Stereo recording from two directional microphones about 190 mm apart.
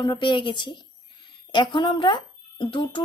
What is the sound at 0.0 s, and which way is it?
A woman's voice, 25° left (ahead or behind).